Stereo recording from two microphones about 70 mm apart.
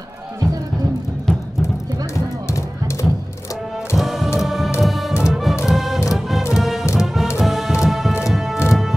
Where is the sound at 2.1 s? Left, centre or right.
Left.